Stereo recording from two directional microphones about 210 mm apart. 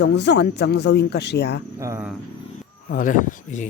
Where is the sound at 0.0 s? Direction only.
55° left (ahead or behind).